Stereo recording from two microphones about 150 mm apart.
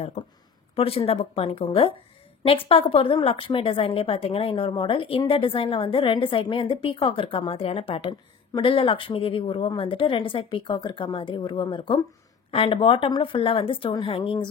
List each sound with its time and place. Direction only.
0.7 s a woman's voice: 40° left (ahead or behind)